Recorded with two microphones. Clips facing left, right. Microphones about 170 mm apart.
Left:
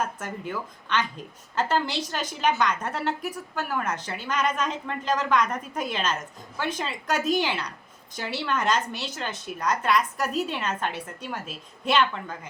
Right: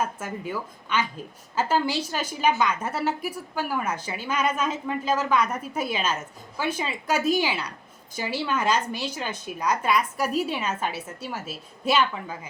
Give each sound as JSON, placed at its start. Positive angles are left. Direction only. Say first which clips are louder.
{"t": 0.0, "sound": "a woman's voice", "louder": "right 1 dB", "side_deg": -10}